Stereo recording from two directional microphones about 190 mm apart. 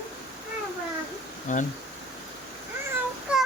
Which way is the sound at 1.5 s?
40° left (ahead or behind).